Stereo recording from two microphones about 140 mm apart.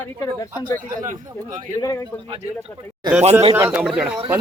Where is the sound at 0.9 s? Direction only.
70° right (ahead or behind).